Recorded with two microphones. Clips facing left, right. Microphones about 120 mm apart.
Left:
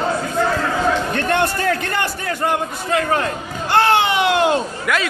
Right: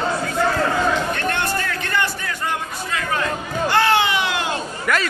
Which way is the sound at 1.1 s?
60° left (ahead or behind).